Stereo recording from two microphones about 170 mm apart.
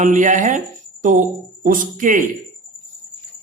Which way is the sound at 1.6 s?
50° right (ahead or behind).